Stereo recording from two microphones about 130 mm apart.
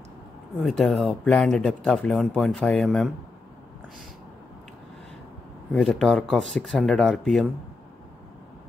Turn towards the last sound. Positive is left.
turn(degrees=0)  # may be behind; listen again after turning